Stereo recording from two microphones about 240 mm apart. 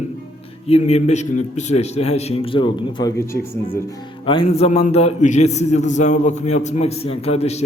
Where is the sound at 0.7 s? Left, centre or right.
Left.